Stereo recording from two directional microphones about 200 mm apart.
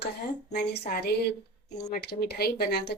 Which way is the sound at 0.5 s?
55° left (ahead or behind).